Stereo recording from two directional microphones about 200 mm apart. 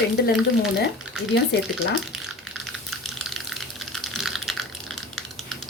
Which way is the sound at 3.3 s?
Centre (ahead or behind).